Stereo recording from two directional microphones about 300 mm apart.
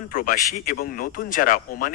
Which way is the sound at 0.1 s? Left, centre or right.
Left.